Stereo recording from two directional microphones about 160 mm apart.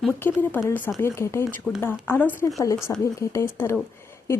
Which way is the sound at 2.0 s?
10° left (ahead or behind).